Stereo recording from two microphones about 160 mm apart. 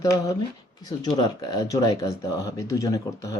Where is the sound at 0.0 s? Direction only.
20° left (ahead or behind).